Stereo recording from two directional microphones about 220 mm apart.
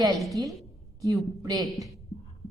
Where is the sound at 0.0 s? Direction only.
15° right (ahead or behind).